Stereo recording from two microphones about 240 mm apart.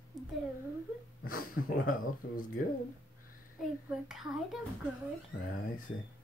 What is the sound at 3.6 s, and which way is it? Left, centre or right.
A child's voice, centre.